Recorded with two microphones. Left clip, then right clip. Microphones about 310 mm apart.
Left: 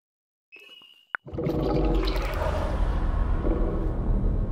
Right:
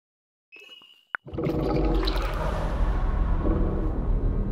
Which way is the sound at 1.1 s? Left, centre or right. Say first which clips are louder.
Even; centre.